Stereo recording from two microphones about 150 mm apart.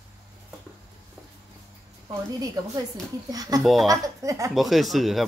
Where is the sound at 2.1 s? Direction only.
25° right (ahead or behind).